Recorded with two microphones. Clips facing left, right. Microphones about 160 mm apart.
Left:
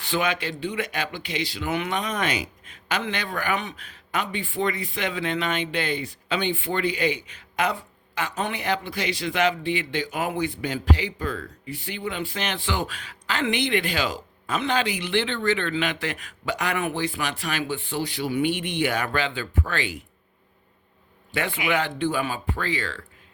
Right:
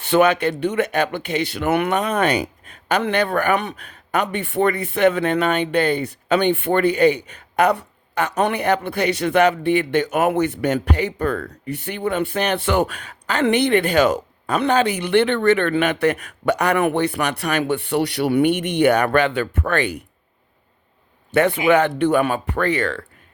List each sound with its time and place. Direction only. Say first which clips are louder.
0.1 s speech: right 10 dB; 65° right (ahead or behind)
21.3 s speech: right 10 dB; 50° right (ahead or behind)
22.0 s speech: right 8 dB; 60° right (ahead or behind)